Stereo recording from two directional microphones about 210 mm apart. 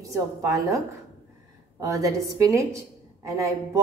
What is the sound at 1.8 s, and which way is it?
A woman's voice, 15° right (ahead or behind).